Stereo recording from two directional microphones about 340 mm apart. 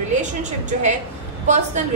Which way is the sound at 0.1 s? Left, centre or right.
Right.